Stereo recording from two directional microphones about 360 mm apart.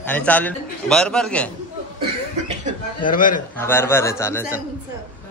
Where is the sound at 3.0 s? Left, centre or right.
Left.